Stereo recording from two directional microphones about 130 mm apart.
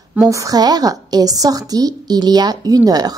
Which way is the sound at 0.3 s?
25° right (ahead or behind).